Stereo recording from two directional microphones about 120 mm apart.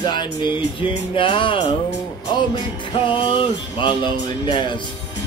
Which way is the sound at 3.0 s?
45° left (ahead or behind).